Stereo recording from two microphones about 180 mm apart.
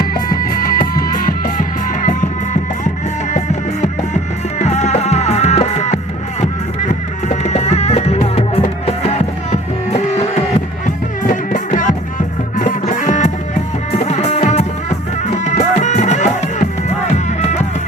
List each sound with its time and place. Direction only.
0.0 s music: 55° left (ahead or behind)